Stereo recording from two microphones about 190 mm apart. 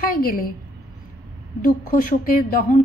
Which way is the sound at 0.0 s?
50° left (ahead or behind).